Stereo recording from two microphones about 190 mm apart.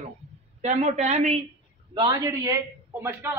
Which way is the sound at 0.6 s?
35° right (ahead or behind).